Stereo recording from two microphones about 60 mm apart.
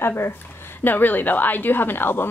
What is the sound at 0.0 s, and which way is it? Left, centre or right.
A woman's voice, left.